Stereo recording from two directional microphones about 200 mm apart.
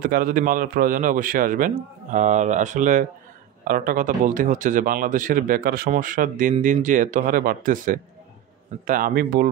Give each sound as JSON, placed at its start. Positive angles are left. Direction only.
{"t": 0.0, "sound": "a man's voice", "side_deg": -45}